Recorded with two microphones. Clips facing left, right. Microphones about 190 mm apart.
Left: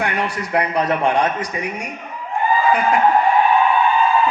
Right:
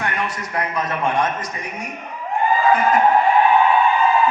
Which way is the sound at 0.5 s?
65° left (ahead or behind).